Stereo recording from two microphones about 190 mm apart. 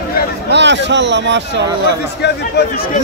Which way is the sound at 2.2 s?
60° left (ahead or behind).